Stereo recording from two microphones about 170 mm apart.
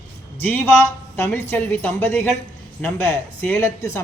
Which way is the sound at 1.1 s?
15° left (ahead or behind).